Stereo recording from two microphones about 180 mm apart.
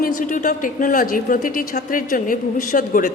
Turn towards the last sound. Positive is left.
turn(degrees=50)  # may be behind; listen again after turning